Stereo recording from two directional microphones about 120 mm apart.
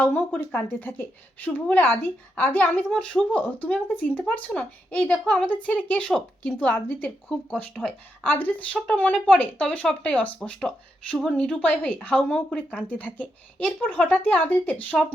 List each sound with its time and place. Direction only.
0.0 s speech: 15° left (ahead or behind)